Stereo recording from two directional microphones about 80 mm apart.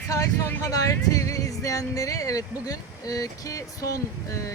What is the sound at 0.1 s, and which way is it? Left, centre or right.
Speech, left.